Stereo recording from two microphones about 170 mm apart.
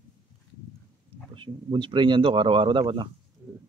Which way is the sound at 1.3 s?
30° right (ahead or behind).